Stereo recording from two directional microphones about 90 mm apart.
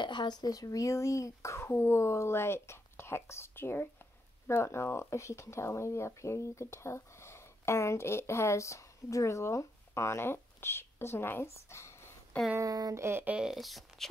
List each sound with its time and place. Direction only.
0.0 s speech: 60° left (ahead or behind); by 11.9 s 30° left (ahead or behind)
12.5 s speech: 45° right (ahead or behind)
13.2 s speech: 10° right (ahead or behind)